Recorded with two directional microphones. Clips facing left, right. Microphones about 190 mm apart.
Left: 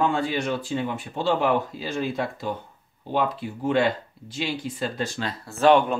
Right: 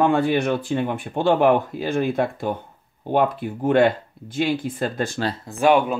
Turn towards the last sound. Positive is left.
turn(degrees=-10)  # may be behind; listen again after turning